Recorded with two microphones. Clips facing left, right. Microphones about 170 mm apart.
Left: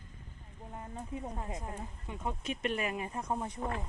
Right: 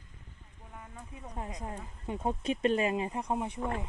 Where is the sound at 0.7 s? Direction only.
30° left (ahead or behind).